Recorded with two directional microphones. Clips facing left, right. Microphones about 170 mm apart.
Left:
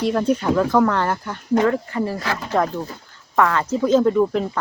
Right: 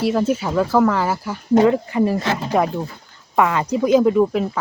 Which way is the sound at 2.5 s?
15° right (ahead or behind).